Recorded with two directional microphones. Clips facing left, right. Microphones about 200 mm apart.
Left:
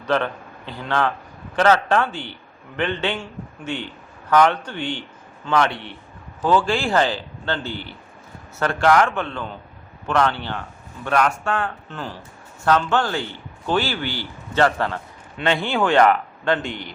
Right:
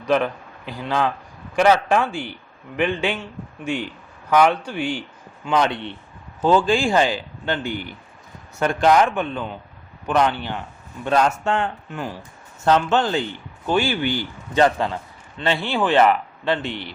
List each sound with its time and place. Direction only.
0.0 s a man's voice: 10° right (ahead or behind)
5.5 s a man's voice: 20° right (ahead or behind)
11.9 s a man's voice: 10° right (ahead or behind)
15.4 s speech: centre (ahead or behind)